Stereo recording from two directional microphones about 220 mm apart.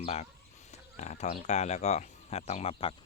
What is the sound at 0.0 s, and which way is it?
Speech, 30° left (ahead or behind).